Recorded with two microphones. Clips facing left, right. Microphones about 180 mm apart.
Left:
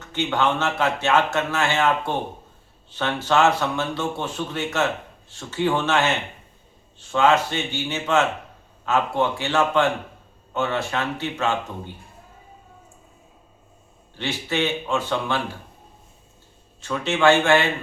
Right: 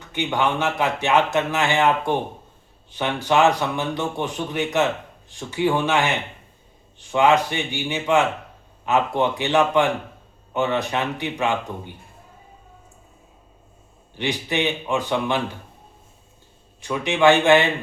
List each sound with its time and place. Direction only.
0.1 s speech: 15° right (ahead or behind)
14.2 s speech: 15° right (ahead or behind)
16.8 s speech: 15° right (ahead or behind)